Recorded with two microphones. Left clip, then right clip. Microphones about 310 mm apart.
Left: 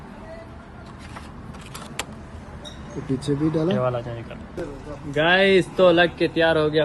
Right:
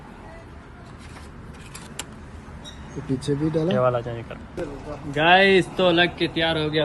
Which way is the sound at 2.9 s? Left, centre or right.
Centre.